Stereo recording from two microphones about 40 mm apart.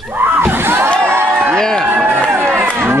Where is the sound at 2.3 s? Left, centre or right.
Right.